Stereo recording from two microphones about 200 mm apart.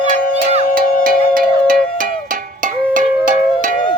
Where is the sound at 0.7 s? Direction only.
45° right (ahead or behind).